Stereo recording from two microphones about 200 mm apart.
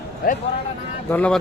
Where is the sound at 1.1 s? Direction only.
5° left (ahead or behind).